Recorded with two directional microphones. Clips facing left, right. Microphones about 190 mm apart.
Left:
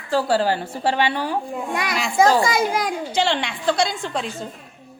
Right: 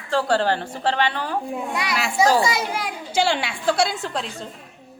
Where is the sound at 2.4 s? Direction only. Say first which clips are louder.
Left 3 dB; 50° left (ahead or behind).